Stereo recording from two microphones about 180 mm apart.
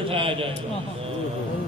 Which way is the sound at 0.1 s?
30° right (ahead or behind).